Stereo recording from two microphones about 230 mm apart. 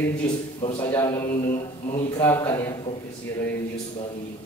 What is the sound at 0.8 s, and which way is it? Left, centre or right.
A man's voice, centre.